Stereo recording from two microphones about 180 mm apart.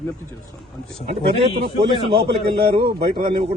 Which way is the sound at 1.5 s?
30° right (ahead or behind).